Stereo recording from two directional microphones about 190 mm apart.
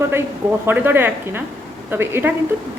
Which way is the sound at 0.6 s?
10° right (ahead or behind).